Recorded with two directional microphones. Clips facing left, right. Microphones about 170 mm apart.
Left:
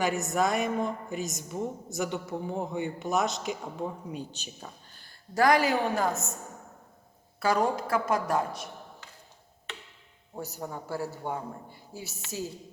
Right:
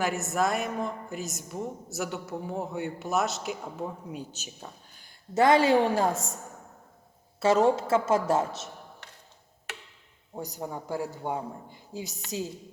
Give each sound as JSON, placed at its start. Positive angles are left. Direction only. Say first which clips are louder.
{"t": 0.0, "sound": "speech", "louder": "even", "side_deg": 0}
{"t": 5.0, "sound": "a woman's voice", "louder": "right 2 dB", "side_deg": -25}
{"t": 7.3, "sound": "a woman's voice", "louder": "right 4 dB", "side_deg": -25}
{"t": 10.3, "sound": "a man's voice", "louder": "right 2 dB", "side_deg": -15}